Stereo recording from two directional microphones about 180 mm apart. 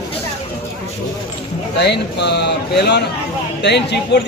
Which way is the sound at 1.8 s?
70° left (ahead or behind).